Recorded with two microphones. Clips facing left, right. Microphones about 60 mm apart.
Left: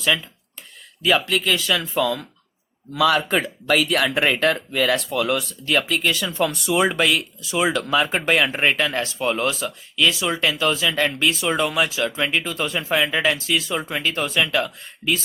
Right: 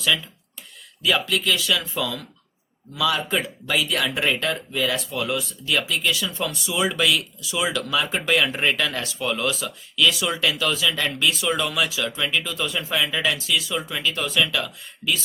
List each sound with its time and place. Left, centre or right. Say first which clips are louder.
1.0 s speech: left 2 dB; left
2.9 s speech: left 5 dB; left